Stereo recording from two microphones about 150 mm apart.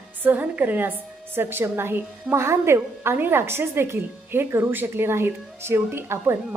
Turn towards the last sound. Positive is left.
turn(degrees=-15)  # may be behind; listen again after turning